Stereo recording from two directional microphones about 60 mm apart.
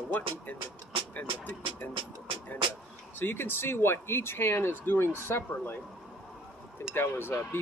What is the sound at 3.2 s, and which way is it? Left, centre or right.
Speech, left.